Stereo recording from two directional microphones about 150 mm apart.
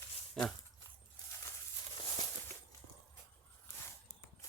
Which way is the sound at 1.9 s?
35° left (ahead or behind).